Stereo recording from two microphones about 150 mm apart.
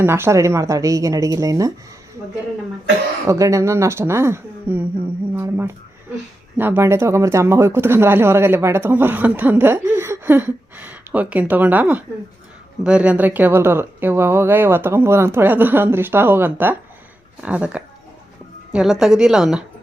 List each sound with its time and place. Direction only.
0.0 s speech: 15° right (ahead or behind)
3.2 s speech: 20° right (ahead or behind); by 19.6 s 5° right (ahead or behind)